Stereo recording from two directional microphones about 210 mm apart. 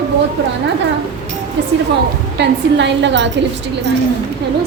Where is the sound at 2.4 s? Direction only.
55° right (ahead or behind).